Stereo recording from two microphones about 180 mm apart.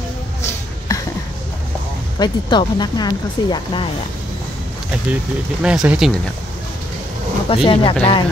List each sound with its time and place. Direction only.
0.4 s a sound: 15° left (ahead or behind)
2.1 s speech: 25° left (ahead or behind)
5.6 s speech: 5° right (ahead or behind)
7.4 s speech: 30° left (ahead or behind)